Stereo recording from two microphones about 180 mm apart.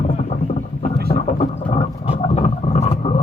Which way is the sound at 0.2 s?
35° left (ahead or behind).